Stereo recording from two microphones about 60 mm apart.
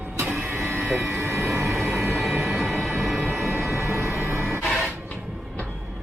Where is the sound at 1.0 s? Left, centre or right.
Right.